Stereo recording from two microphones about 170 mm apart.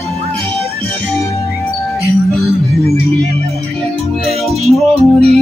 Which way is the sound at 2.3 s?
Centre (ahead or behind).